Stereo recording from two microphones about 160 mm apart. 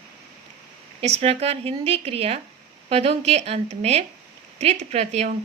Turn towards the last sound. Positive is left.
turn(degrees=-40)  # may be behind; listen again after turning